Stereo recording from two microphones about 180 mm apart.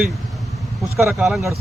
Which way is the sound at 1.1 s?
Centre (ahead or behind).